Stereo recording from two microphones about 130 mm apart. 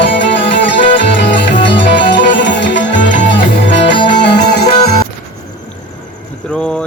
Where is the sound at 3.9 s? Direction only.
40° left (ahead or behind).